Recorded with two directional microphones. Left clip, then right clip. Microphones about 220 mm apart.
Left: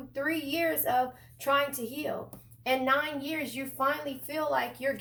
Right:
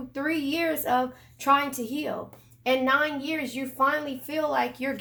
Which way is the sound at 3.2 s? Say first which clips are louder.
Right 4 dB; 35° right (ahead or behind).